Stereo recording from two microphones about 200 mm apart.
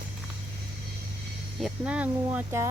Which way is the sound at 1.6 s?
5° right (ahead or behind).